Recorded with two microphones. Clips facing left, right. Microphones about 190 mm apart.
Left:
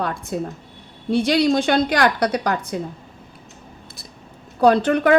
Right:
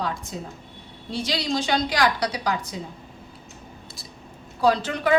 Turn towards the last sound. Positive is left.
turn(degrees=55)  # may be behind; listen again after turning